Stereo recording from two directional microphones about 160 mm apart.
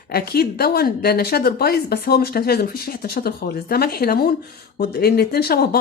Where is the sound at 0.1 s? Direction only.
70° left (ahead or behind).